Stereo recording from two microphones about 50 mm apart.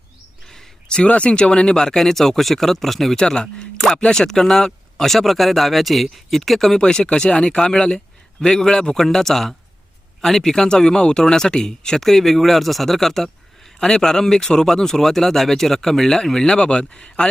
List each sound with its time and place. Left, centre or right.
0.4 s a sound: centre
1.0 s speech: left; by 6.7 s centre
6.7 s speech: centre